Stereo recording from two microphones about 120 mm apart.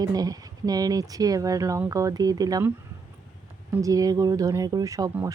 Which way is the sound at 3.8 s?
30° right (ahead or behind).